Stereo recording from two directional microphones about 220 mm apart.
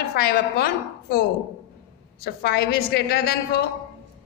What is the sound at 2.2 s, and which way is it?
A woman's voice, 45° left (ahead or behind).